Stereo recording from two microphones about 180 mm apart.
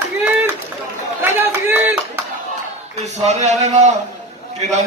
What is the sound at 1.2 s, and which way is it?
Run, 10° right (ahead or behind).